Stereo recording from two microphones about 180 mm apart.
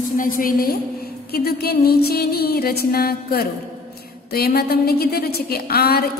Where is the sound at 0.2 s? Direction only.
50° left (ahead or behind).